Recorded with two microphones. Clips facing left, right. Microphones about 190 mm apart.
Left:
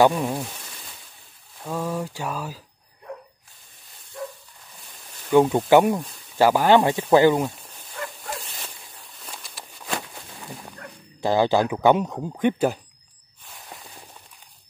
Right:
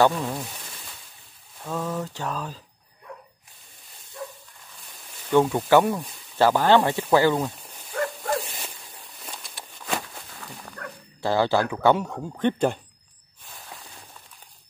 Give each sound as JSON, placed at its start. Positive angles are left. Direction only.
{"t": 0.0, "sound": "speech", "side_deg": 15}
{"t": 1.6, "sound": "speech", "side_deg": 10}
{"t": 5.3, "sound": "speech", "side_deg": 15}
{"t": 7.9, "sound": "bow-wow", "side_deg": -50}
{"t": 8.5, "sound": "a sound", "side_deg": -10}
{"t": 9.3, "sound": "a sound", "side_deg": 5}
{"t": 10.4, "sound": "dog", "side_deg": 20}
{"t": 11.1, "sound": "speech", "side_deg": 15}